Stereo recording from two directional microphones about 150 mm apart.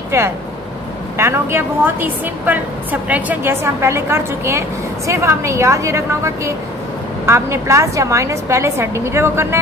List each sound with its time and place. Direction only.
1.1 s a woman's voice: 15° right (ahead or behind)